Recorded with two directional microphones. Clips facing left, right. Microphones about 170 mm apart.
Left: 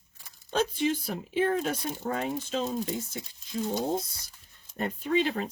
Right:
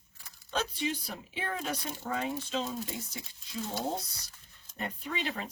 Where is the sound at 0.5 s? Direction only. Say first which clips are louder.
Left 6 dB; 50° left (ahead or behind).